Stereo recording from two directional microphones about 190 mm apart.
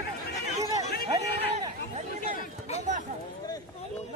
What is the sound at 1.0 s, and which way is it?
Chatter, 30° right (ahead or behind).